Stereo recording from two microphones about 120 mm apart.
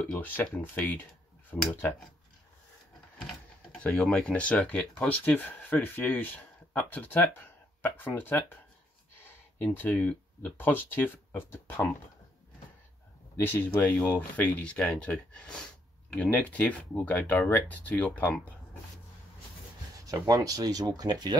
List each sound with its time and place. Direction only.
0.2 s speech: 15° left (ahead or behind)
3.8 s speech: 10° left (ahead or behind)
9.6 s speech: 10° left (ahead or behind)
13.4 s speech: 15° left (ahead or behind)
20.1 s speech: 30° right (ahead or behind)